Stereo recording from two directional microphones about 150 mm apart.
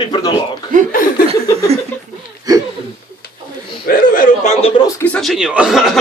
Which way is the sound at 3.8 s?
70° left (ahead or behind).